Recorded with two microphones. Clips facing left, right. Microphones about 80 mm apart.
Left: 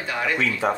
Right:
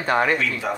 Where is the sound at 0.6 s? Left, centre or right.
Left.